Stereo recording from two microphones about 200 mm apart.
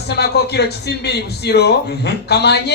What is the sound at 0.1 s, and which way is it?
A man's voice, 55° left (ahead or behind).